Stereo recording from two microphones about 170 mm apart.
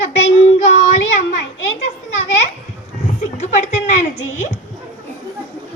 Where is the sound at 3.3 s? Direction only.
45° left (ahead or behind).